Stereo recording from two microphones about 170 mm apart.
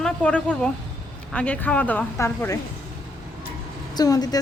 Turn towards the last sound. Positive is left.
turn(degrees=20)  # may be behind; listen again after turning